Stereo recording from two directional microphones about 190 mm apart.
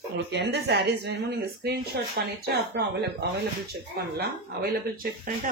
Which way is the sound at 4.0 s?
55° right (ahead or behind).